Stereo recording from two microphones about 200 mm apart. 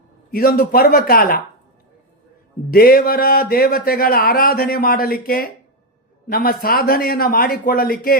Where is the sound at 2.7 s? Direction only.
45° left (ahead or behind).